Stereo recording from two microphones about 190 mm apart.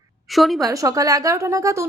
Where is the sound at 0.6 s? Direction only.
20° right (ahead or behind).